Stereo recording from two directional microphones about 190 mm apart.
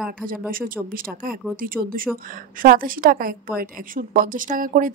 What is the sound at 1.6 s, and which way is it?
Speech, 50° right (ahead or behind).